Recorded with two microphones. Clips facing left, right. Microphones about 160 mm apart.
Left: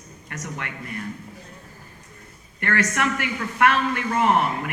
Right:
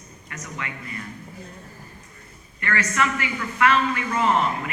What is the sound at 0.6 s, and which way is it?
Speech, 60° left (ahead or behind).